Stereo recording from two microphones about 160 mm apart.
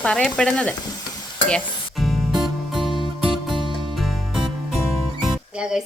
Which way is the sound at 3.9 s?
Centre (ahead or behind).